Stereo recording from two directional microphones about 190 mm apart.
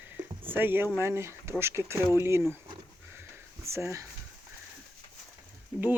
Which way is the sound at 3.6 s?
15° right (ahead or behind).